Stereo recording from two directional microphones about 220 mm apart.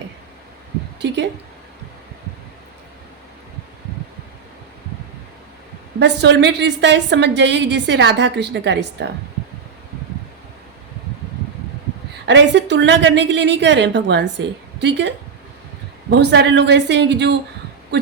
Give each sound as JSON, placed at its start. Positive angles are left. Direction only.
{"t": 6.0, "sound": "a woman's voice", "side_deg": -50}
{"t": 12.3, "sound": "a woman's voice", "side_deg": -55}